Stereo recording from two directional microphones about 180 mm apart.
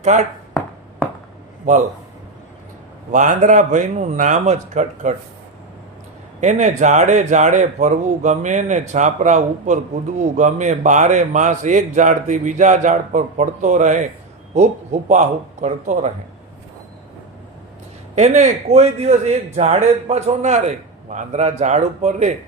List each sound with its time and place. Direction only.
0.0 s speech: 40° right (ahead or behind)
3.1 s a man's voice: 45° right (ahead or behind)
6.4 s a man's voice: 40° right (ahead or behind)
15.1 s a man's voice: 40° right (ahead or behind)
18.1 s a man's voice: 40° right (ahead or behind)